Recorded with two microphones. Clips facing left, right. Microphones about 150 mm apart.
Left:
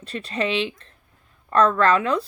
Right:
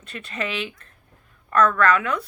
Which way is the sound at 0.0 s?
35° left (ahead or behind).